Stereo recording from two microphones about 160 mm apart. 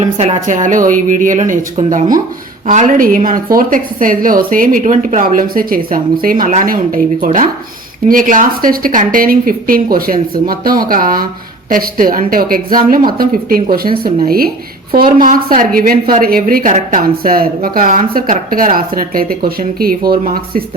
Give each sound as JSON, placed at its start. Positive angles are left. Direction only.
{"t": 0.0, "sound": "speech", "side_deg": -45}